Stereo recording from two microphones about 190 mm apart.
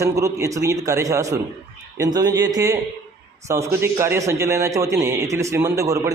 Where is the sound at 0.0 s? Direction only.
15° right (ahead or behind).